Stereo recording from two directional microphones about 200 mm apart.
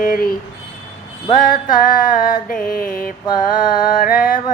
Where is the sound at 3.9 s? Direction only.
45° left (ahead or behind).